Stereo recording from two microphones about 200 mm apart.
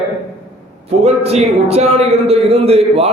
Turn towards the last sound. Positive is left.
turn(degrees=-30)  # may be behind; listen again after turning